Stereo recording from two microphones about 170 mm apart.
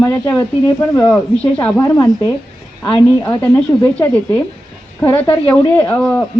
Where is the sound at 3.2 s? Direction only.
15° left (ahead or behind).